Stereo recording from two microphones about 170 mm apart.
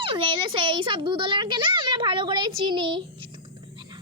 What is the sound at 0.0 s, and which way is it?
A child's voice, 30° right (ahead or behind).